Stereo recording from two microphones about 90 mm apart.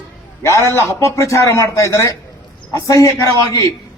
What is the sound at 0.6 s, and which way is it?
Speech, 30° right (ahead or behind).